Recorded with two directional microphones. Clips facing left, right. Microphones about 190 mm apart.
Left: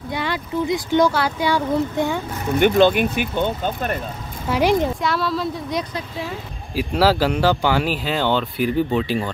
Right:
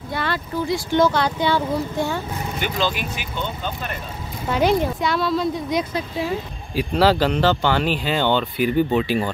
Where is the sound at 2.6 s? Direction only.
55° left (ahead or behind).